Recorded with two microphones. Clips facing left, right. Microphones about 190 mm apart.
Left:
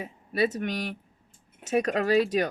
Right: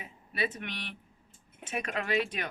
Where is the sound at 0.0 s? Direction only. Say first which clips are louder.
Left 9 dB; 40° left (ahead or behind).